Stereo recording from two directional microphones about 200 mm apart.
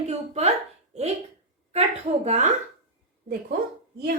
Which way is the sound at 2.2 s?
35° right (ahead or behind).